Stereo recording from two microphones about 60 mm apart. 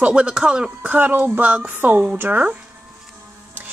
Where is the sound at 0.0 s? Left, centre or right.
Centre; by 2.5 s right.